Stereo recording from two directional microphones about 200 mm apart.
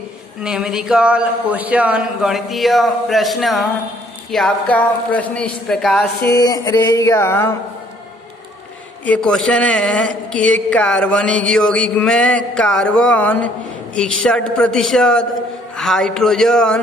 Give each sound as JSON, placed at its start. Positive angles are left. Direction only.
{"t": 0.4, "sound": "a woman's voice", "side_deg": -5}
{"t": 6.3, "sound": "a sound", "side_deg": 20}
{"t": 9.0, "sound": "a woman's voice", "side_deg": 5}